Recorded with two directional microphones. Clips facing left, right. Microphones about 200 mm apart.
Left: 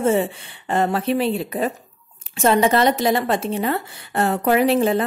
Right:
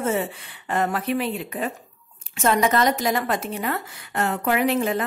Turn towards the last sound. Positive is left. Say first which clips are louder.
# left 5 dB
turn(degrees=30)  # may be behind; listen again after turning